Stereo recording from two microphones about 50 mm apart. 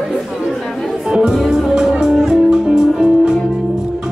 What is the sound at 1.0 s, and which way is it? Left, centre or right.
Music, centre.